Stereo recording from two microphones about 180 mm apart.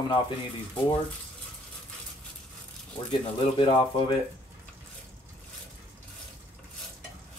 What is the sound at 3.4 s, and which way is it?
Speech, 25° left (ahead or behind).